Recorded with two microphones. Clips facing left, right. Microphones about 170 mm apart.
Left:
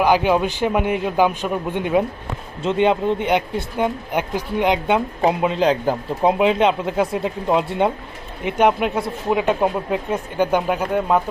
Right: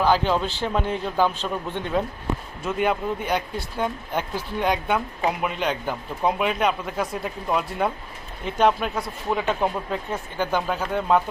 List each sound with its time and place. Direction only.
0.0 s speech: 15° left (ahead or behind)
2.6 s speech: 25° left (ahead or behind)